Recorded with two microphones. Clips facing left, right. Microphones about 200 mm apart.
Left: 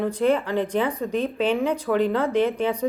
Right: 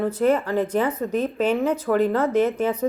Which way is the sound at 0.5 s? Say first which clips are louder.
Right 1 dB; 5° right (ahead or behind).